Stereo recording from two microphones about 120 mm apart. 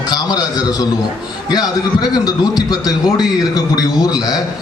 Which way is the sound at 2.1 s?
35° left (ahead or behind).